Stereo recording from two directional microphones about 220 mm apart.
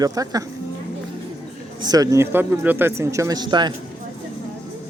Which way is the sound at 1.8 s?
15° right (ahead or behind).